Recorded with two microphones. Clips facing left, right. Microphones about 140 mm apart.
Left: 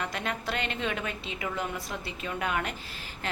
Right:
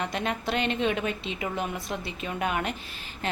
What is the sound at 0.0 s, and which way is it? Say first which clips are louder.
A woman's voice: right 3 dB; 20° right (ahead or behind).